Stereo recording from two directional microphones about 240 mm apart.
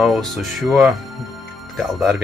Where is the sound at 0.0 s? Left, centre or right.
Centre.